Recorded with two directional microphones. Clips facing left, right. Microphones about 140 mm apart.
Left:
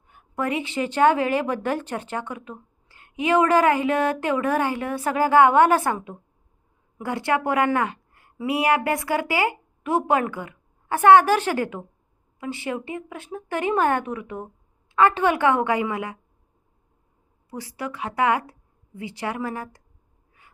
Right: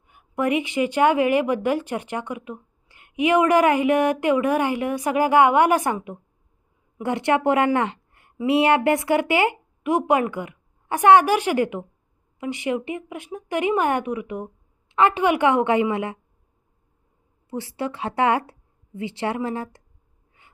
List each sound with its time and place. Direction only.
0.1 s a woman's voice: 15° right (ahead or behind)
17.5 s a woman's voice: 25° right (ahead or behind)